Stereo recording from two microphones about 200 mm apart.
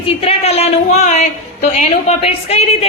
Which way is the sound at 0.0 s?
30° left (ahead or behind).